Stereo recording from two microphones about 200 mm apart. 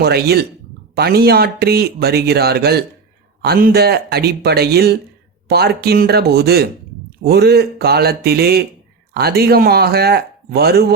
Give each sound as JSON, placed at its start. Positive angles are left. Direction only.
{"t": 0.0, "sound": "speech", "side_deg": -50}